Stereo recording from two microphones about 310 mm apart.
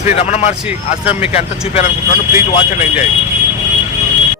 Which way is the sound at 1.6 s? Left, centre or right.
Centre.